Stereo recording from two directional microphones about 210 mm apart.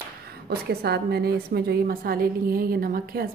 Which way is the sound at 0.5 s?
50° right (ahead or behind).